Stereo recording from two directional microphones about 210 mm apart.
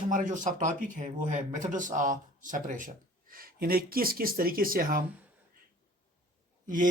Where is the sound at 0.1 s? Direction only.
40° right (ahead or behind).